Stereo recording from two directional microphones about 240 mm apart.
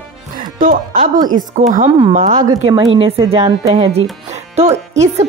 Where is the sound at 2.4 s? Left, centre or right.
Centre.